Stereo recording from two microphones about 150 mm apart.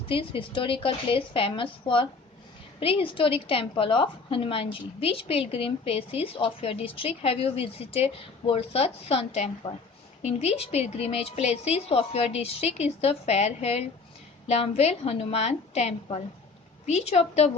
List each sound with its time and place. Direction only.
0.1 s a woman's voice: 35° left (ahead or behind)